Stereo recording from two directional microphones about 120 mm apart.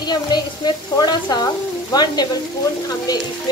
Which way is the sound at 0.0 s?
35° left (ahead or behind).